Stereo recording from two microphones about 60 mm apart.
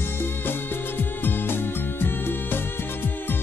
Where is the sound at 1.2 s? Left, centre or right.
Left.